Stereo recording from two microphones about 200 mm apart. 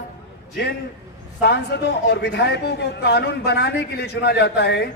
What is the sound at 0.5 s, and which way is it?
A man's voice, 55° left (ahead or behind).